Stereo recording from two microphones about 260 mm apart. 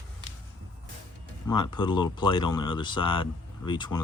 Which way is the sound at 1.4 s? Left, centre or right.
Centre.